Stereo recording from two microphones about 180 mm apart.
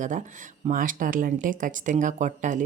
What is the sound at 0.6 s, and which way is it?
Speech, 45° right (ahead or behind).